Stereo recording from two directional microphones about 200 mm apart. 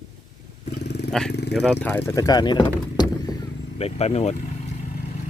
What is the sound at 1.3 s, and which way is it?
Speech, 55° left (ahead or behind).